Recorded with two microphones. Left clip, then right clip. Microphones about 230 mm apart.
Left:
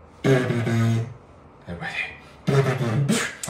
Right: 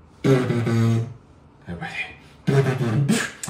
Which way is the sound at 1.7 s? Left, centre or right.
Centre.